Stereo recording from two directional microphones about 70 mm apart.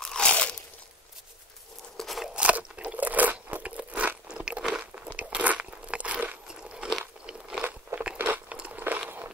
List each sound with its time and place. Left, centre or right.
0.0 s crunch: centre
2.0 s crunch: centre
2.2 s crunch: centre